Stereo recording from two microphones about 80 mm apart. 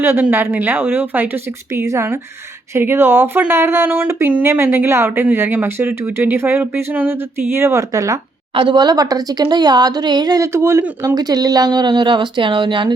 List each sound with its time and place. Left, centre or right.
0.0 s a woman's voice: right
8.5 s speech: right
10.4 s speech: right
11.0 s speech: right